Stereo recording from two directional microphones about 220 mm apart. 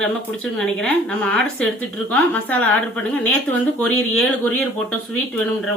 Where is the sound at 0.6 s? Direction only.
5° left (ahead or behind).